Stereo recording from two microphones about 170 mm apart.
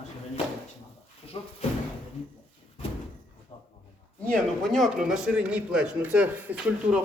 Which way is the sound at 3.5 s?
30° left (ahead or behind).